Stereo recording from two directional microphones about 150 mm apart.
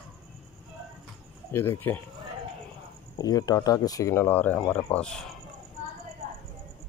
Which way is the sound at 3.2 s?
25° left (ahead or behind).